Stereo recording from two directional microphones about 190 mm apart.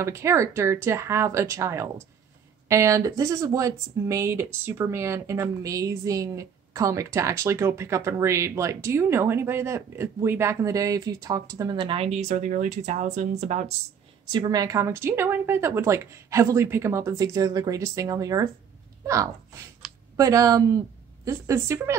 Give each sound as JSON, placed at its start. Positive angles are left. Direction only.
{"t": 0.0, "sound": "speech", "side_deg": -15}
{"t": 14.3, "sound": "speech", "side_deg": -20}